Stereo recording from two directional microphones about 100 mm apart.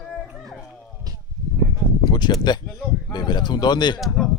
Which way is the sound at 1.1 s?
40° right (ahead or behind).